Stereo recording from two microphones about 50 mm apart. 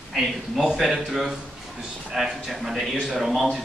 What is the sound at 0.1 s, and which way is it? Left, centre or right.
A man's voice, centre.